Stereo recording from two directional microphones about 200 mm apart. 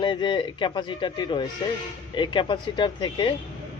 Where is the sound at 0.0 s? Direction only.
25° left (ahead or behind).